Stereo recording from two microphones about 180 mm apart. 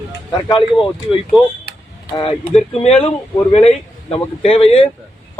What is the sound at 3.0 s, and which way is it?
Speech, 30° left (ahead or behind).